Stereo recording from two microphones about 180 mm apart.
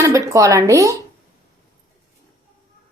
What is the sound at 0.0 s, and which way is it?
Speech, 15° right (ahead or behind).